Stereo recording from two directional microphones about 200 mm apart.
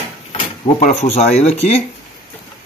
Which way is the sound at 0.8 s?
35° left (ahead or behind).